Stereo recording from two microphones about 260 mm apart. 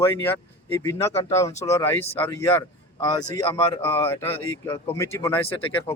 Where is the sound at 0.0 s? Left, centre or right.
Centre.